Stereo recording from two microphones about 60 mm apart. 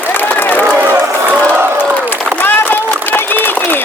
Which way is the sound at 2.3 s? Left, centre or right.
Left.